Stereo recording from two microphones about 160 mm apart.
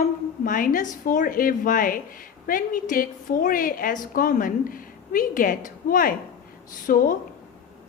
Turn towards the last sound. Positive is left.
turn(degrees=60)  # may be behind; listen again after turning